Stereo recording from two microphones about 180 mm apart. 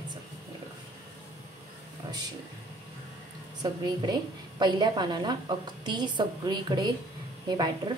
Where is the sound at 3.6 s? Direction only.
25° right (ahead or behind).